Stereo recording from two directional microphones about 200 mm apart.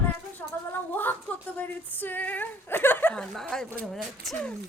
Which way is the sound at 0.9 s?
10° left (ahead or behind).